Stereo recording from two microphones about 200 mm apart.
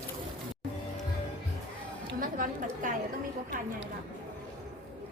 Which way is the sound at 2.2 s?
40° right (ahead or behind).